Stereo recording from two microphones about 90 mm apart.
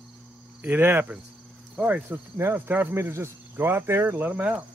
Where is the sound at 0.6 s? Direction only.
25° right (ahead or behind).